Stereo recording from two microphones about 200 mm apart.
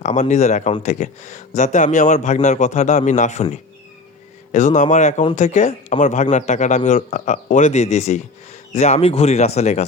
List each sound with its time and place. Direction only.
0.0 s speech: 35° left (ahead or behind)
4.5 s speech: 40° left (ahead or behind)